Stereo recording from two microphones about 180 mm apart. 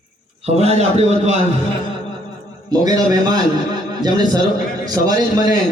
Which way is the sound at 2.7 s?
20° right (ahead or behind).